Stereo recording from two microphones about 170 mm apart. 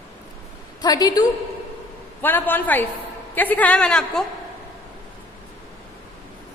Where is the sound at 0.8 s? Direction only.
25° left (ahead or behind).